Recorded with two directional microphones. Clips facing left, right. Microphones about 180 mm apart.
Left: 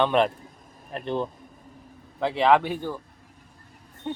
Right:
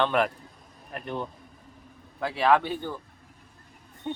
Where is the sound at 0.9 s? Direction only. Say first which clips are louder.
Left 5 dB; 30° left (ahead or behind); by 2.9 s 10° left (ahead or behind).